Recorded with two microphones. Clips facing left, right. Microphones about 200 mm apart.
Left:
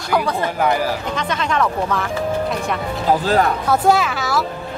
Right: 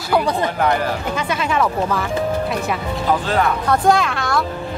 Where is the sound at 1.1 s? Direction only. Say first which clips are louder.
Right 1 dB; 5° right (ahead or behind).